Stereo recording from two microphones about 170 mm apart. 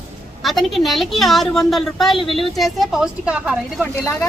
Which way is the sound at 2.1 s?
30° left (ahead or behind).